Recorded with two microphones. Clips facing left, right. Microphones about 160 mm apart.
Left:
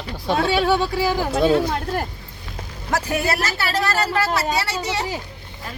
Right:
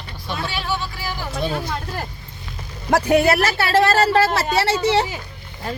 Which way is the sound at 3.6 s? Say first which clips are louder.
Right 6 dB; 25° right (ahead or behind).